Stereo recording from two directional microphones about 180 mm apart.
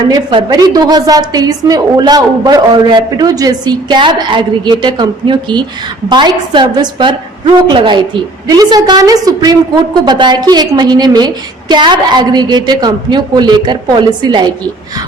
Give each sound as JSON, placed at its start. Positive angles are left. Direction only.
{"t": 0.1, "sound": "a woman's voice", "side_deg": -25}